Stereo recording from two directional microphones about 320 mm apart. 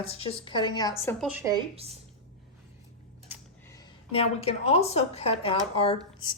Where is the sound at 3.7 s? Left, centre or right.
Centre.